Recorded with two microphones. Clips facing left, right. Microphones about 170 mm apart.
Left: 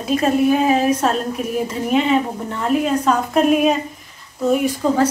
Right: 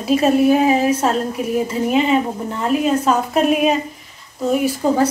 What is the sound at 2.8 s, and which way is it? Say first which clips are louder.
Speech: right 3 dB; 5° right (ahead or behind).